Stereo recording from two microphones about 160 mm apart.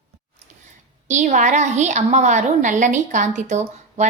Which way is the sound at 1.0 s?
50° right (ahead or behind).